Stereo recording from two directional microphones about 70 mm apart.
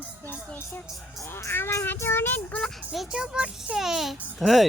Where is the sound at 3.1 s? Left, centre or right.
Centre.